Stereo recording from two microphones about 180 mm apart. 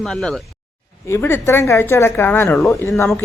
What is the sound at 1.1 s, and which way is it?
A woman's voice, 15° left (ahead or behind).